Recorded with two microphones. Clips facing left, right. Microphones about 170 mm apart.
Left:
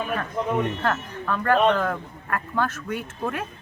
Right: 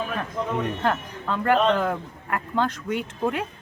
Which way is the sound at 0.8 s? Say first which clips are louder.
Right 1 dB; 20° right (ahead or behind).